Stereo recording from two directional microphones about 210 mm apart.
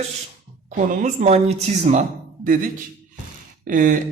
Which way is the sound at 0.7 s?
35° right (ahead or behind).